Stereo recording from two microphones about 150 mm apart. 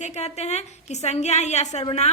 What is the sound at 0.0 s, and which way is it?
A woman's voice, 50° left (ahead or behind).